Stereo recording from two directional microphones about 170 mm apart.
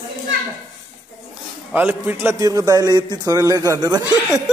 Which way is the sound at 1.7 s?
10° right (ahead or behind).